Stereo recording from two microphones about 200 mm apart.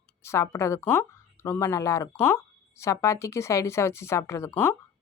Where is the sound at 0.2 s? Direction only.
15° left (ahead or behind).